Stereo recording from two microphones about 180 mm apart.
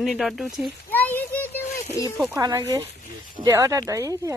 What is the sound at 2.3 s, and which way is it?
Speech, 20° right (ahead or behind).